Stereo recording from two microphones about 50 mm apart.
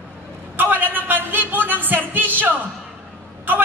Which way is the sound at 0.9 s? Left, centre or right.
Right.